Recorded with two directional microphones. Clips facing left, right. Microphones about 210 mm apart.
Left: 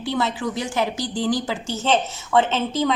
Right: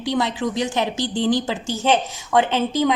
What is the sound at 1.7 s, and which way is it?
A woman's voice, 10° right (ahead or behind).